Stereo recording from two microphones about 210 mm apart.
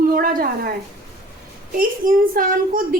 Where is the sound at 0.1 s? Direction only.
40° right (ahead or behind).